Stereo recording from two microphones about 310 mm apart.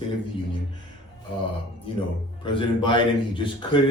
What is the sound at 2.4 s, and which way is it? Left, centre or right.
A man's voice, centre.